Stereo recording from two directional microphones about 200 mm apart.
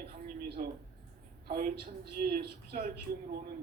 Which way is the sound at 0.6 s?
40° right (ahead or behind).